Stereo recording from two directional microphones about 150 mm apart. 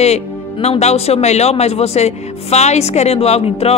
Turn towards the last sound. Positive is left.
turn(degrees=40)  # may be behind; listen again after turning